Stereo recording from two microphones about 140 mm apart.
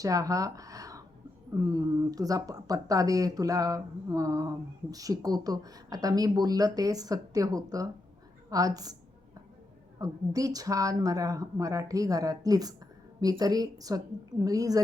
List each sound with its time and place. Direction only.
0.0 s speech: 25° right (ahead or behind)
10.0 s speech: 25° right (ahead or behind)